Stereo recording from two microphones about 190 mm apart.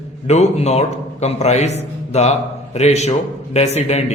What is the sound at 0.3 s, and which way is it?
A man's voice, 35° left (ahead or behind).